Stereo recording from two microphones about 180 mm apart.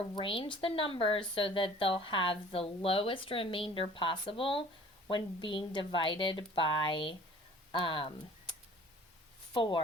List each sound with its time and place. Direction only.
0.1 s a woman's voice: 30° left (ahead or behind)
9.5 s speech: 25° left (ahead or behind)